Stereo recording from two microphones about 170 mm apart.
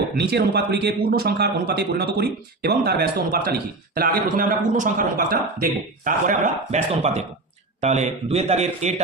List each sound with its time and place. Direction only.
0.2 s a man's voice: 70° right (ahead or behind); by 9.0 s 40° right (ahead or behind)